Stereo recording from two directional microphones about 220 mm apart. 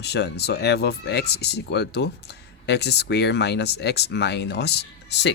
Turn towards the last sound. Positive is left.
turn(degrees=50)  # may be behind; listen again after turning